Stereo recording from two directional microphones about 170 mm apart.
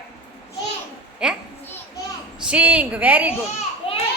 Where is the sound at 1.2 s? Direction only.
5° right (ahead or behind).